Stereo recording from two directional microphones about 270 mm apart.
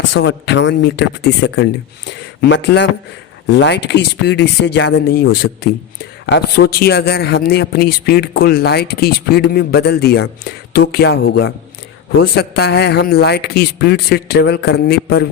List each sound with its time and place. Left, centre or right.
0.1 s a man's voice: left